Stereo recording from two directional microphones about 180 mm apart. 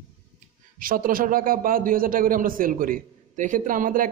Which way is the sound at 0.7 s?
50° right (ahead or behind).